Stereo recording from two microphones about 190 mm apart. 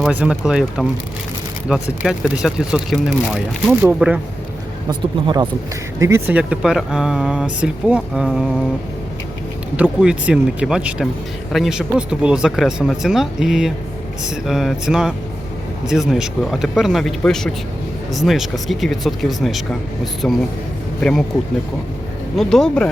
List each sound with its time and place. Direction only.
0.0 s speech: 5° right (ahead or behind)
2.0 s speech: 5° right (ahead or behind)
4.9 s speech: 20° right (ahead or behind); by 8.4 s 5° right (ahead or behind)
9.7 s speech: 5° right (ahead or behind)
22.4 s speech: centre (ahead or behind)